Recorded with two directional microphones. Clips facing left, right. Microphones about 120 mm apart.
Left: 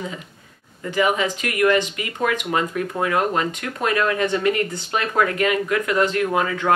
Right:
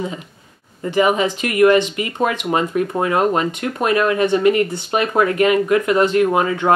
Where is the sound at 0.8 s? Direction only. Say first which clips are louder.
Right 4 dB; 25° right (ahead or behind).